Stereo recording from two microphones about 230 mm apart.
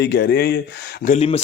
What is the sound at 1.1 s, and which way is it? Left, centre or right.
Speech, left.